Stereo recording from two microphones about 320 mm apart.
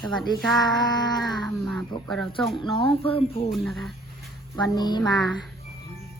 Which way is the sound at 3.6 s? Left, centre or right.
Centre.